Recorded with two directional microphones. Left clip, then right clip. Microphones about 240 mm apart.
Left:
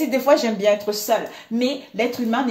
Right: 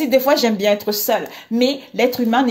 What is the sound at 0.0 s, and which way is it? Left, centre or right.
A woman's voice, right.